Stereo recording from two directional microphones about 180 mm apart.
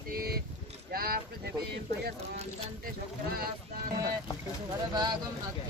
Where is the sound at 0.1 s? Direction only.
55° right (ahead or behind).